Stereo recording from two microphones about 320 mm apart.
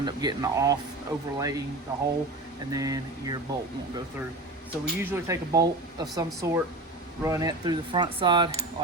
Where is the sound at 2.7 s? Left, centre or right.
Centre.